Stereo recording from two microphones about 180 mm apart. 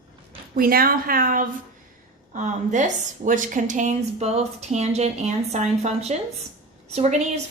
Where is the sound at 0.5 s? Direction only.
55° right (ahead or behind).